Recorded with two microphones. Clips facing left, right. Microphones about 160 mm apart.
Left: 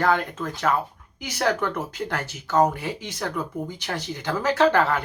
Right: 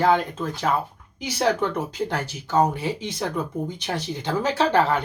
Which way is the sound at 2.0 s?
30° right (ahead or behind).